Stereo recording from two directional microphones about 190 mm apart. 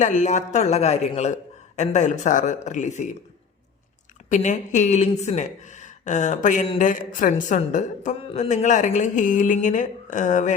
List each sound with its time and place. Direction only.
0.0 s a woman's voice: 40° left (ahead or behind)
4.3 s a woman's voice: 40° left (ahead or behind)